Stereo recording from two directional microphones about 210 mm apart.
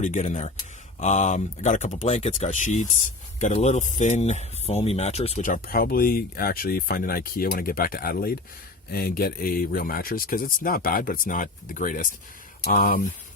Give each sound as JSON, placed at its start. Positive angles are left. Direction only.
{"t": 0.0, "sound": "speech", "side_deg": 35}